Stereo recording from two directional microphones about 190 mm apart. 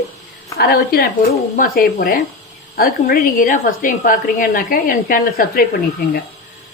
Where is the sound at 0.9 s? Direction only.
55° left (ahead or behind).